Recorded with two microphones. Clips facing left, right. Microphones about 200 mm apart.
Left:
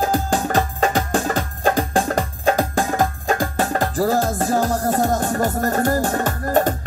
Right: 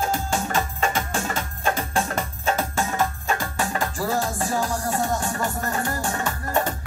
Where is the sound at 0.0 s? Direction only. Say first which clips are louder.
Left 5 dB; 35° left (ahead or behind).